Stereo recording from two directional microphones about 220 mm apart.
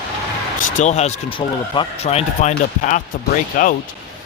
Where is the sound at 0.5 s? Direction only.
35° left (ahead or behind).